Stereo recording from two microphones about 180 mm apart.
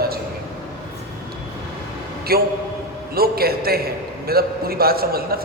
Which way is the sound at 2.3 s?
55° right (ahead or behind).